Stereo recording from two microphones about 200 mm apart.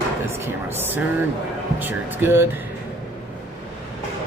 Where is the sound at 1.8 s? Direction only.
10° right (ahead or behind).